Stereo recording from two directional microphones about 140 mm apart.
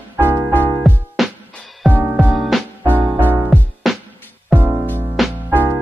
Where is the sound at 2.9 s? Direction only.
15° right (ahead or behind).